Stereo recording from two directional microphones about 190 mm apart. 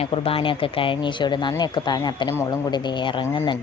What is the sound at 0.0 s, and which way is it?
A woman's voice, 30° left (ahead or behind).